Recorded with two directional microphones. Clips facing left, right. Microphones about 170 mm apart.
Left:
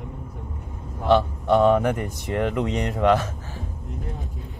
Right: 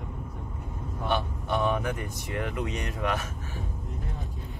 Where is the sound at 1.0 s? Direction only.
90° left.